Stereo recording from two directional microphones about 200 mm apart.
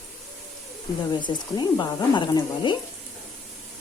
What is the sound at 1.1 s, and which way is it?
Speech, 20° left (ahead or behind).